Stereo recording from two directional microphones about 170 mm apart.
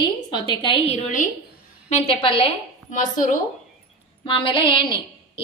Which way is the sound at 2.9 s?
50° left (ahead or behind).